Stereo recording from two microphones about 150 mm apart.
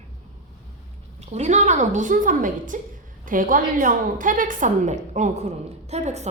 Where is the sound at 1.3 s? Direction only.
50° right (ahead or behind).